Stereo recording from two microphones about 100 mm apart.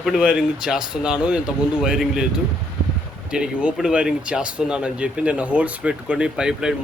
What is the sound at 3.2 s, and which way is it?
Speech, 10° right (ahead or behind).